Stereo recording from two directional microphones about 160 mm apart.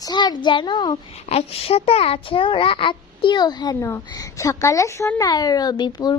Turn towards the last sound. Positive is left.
turn(degrees=25)  # may be behind; listen again after turning